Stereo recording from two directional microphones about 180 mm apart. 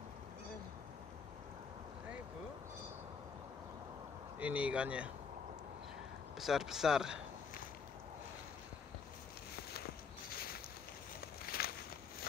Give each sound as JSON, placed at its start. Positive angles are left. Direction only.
{"t": 4.4, "sound": "speech", "side_deg": -10}
{"t": 6.4, "sound": "speech", "side_deg": 0}
{"t": 10.3, "sound": "a sound", "side_deg": 55}
{"t": 11.4, "sound": "walk", "side_deg": 60}